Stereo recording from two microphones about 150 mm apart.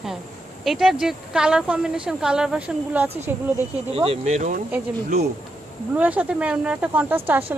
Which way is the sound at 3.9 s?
40° right (ahead or behind).